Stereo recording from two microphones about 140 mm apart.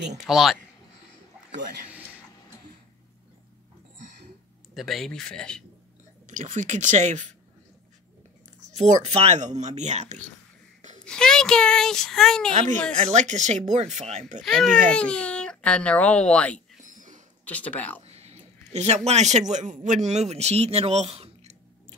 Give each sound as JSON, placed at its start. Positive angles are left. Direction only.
{"t": 0.3, "sound": "speech", "side_deg": -5}
{"t": 1.5, "sound": "a man's voice", "side_deg": -90}
{"t": 1.9, "sound": "a sound", "side_deg": -10}
{"t": 4.7, "sound": "speech", "side_deg": 0}
{"t": 6.2, "sound": "speech", "side_deg": -60}
{"t": 8.5, "sound": "speech", "side_deg": -55}
{"t": 11.1, "sound": "speech", "side_deg": 5}
{"t": 12.9, "sound": "speech", "side_deg": -55}
{"t": 14.4, "sound": "a child's voice", "side_deg": 0}
{"t": 16.7, "sound": "a sound", "side_deg": -65}
{"t": 17.5, "sound": "a child's voice", "side_deg": 10}
{"t": 18.0, "sound": "a sound", "side_deg": -50}
{"t": 19.0, "sound": "speech", "side_deg": -55}